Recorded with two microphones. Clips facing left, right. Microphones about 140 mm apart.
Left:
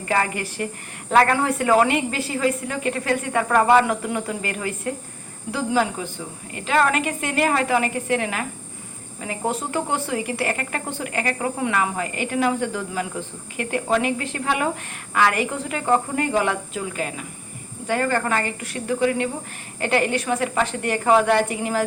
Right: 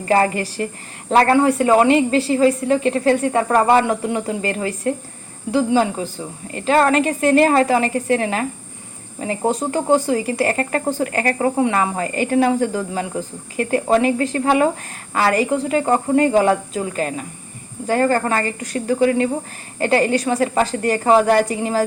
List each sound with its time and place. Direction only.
0.1 s a woman's voice: 30° right (ahead or behind)